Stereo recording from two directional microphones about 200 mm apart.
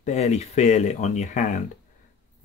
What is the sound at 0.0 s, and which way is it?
Speech, 35° left (ahead or behind).